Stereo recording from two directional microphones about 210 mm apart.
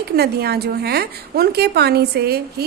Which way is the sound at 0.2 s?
50° right (ahead or behind).